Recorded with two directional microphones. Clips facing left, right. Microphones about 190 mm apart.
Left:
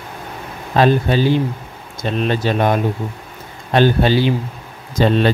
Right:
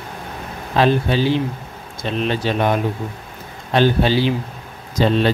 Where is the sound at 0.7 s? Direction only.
45° left (ahead or behind).